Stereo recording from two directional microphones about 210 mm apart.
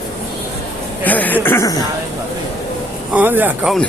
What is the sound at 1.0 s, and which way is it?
Speech, 10° left (ahead or behind).